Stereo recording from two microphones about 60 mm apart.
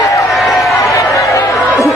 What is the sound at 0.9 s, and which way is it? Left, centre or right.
Chatter, left.